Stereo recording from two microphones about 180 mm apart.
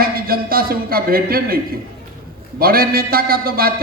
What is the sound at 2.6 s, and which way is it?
A man's voice, 55° right (ahead or behind).